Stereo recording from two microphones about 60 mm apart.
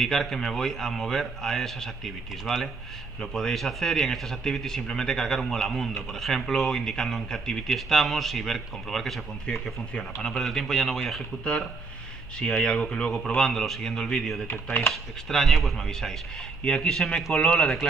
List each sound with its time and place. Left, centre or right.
0.0 s a man's voice: centre
12.4 s a man's voice: centre
14.5 s speech: left
14.9 s a man's voice: centre